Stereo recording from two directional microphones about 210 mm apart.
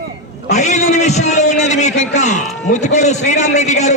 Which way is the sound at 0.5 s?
35° left (ahead or behind).